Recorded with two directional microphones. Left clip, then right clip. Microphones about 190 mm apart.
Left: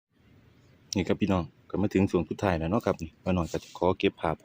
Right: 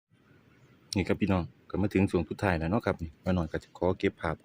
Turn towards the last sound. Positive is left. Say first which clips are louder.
# left 3 dB
turn(degrees=0)  # may be behind; listen again after turning